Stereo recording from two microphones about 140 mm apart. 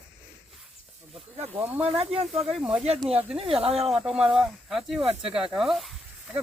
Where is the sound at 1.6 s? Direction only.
10° right (ahead or behind).